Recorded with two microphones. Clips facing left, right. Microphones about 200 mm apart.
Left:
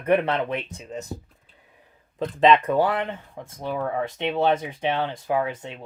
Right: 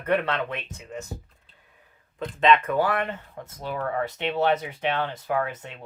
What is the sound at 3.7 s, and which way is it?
Speech, 15° left (ahead or behind).